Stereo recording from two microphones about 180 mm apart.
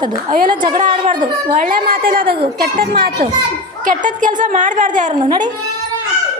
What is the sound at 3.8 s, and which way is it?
A woman's voice, 45° right (ahead or behind).